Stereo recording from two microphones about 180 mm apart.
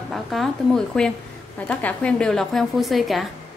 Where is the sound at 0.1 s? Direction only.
Centre (ahead or behind).